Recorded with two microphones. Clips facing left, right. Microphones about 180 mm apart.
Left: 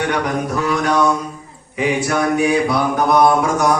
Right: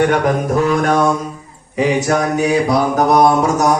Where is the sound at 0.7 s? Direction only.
50° right (ahead or behind).